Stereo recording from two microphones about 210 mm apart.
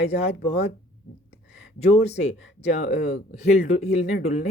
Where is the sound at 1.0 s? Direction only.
90° left.